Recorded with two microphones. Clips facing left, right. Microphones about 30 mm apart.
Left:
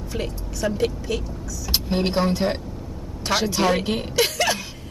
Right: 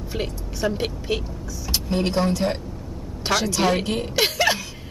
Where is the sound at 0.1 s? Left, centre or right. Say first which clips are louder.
Even; centre.